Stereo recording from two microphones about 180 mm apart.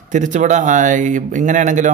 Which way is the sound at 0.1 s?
45° right (ahead or behind).